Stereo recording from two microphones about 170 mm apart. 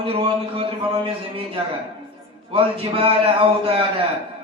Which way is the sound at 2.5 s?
30° right (ahead or behind).